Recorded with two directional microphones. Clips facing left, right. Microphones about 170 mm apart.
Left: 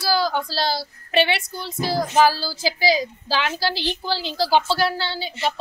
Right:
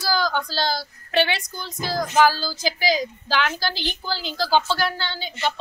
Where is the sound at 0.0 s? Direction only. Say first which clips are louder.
Left 2 dB; 5° left (ahead or behind).